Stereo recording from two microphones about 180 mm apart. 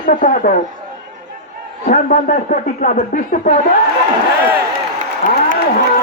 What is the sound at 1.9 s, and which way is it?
Speech, 50° left (ahead or behind).